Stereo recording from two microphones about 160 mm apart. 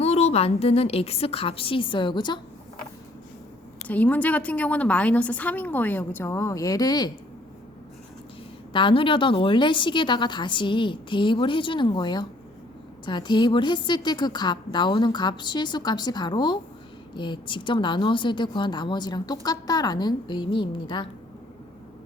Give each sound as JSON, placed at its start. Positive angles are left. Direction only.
{"t": 0.0, "sound": "a woman's voice", "side_deg": 40}
{"t": 3.8, "sound": "a woman's voice", "side_deg": 10}
{"t": 8.7, "sound": "a woman's voice", "side_deg": 30}